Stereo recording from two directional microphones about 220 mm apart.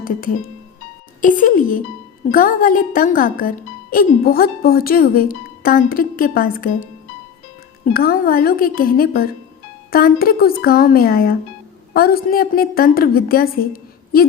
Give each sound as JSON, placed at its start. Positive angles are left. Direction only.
{"t": 0.0, "sound": "music", "side_deg": 40}
{"t": 1.2, "sound": "a woman's voice", "side_deg": 35}
{"t": 7.9, "sound": "a woman's voice", "side_deg": 40}